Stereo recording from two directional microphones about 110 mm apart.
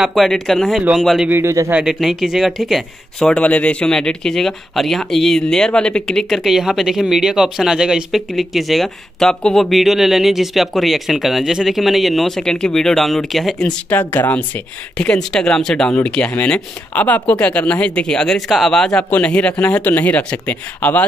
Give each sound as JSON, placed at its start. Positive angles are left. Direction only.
{"t": 0.0, "sound": "speech", "side_deg": 0}
{"t": 1.3, "sound": "speech", "side_deg": -25}
{"t": 1.7, "sound": "speech", "side_deg": -5}